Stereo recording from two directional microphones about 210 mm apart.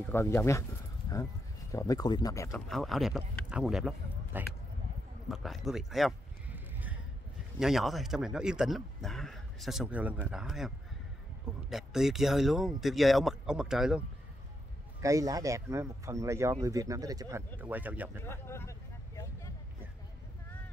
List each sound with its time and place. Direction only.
0.0 s speech: 10° left (ahead or behind)
1.7 s speech: 15° left (ahead or behind)
2.5 s speech: centre (ahead or behind)
5.3 s a sound: centre (ahead or behind)
7.5 s speech: centre (ahead or behind)
11.7 s speech: centre (ahead or behind)
15.0 s speech: 15° right (ahead or behind)
18.2 s a sound: 10° left (ahead or behind)